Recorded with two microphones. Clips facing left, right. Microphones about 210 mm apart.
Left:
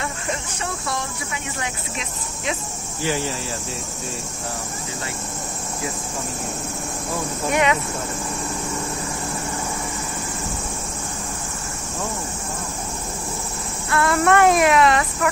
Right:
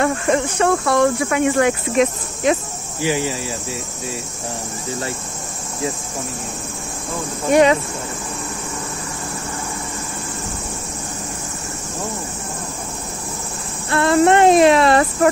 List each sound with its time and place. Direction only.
0.0 s speech: 60° right (ahead or behind)
3.0 s cricket: 15° right (ahead or behind)
7.5 s speech: 35° right (ahead or behind)
13.8 s speech: 25° right (ahead or behind)